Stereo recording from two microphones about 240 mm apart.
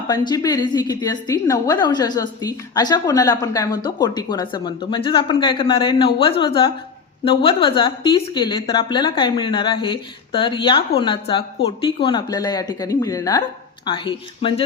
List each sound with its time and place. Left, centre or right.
0.1 s a woman's voice: centre